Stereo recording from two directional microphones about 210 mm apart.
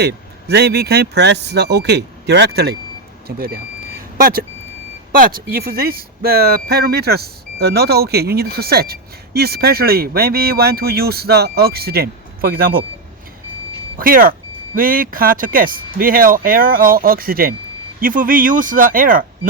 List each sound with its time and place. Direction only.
0.0 s speech: 50° right (ahead or behind)
14.0 s speech: 45° right (ahead or behind)